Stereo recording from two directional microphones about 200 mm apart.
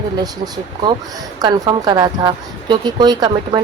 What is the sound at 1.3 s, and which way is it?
Speech, 20° right (ahead or behind).